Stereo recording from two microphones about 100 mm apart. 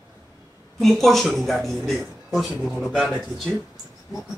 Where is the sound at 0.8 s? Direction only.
Centre (ahead or behind).